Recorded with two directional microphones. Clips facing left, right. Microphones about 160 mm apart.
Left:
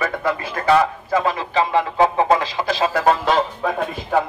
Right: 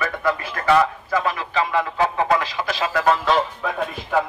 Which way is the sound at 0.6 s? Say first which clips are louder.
Left 1 dB; 30° left (ahead or behind).